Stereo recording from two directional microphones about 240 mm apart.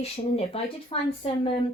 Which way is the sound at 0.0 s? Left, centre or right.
Left.